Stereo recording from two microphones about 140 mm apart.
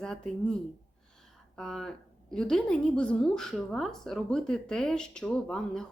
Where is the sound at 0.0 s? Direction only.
5° left (ahead or behind).